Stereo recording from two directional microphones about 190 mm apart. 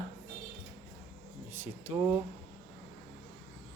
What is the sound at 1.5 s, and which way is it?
Speech, 10° right (ahead or behind).